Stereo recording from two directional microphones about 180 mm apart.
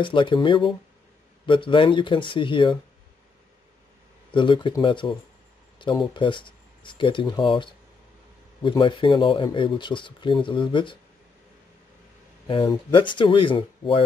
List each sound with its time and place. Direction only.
0.0 s speech: 25° left (ahead or behind)
4.3 s speech: 25° left (ahead or behind)
12.4 s speech: 25° left (ahead or behind)